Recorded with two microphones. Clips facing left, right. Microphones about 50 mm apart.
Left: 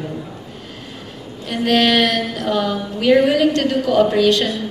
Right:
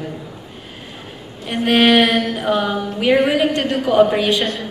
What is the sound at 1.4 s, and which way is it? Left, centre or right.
A woman's voice, centre.